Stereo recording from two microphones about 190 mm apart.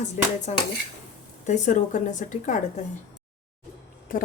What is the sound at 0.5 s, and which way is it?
A woman's voice, 40° left (ahead or behind).